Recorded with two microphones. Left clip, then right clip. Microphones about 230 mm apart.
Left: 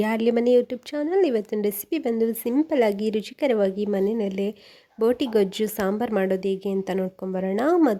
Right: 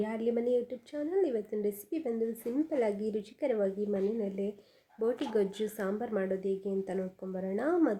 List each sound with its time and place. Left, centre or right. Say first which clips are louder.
0.0 s speech: left 10 dB; left